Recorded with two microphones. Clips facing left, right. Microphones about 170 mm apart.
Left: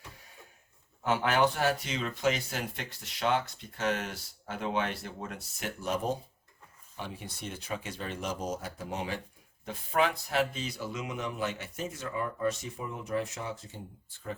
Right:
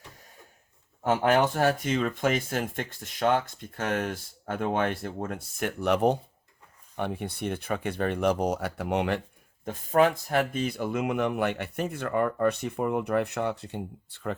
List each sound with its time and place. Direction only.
1.0 s speech: 50° right (ahead or behind); by 9.2 s 65° right (ahead or behind)
9.6 s speech: 50° right (ahead or behind); by 14.3 s 70° right (ahead or behind)